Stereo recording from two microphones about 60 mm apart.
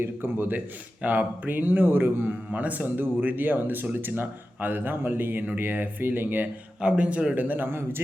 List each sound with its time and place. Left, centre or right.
0.0 s speech: right
6.8 s a man's voice: centre; by 8.0 s right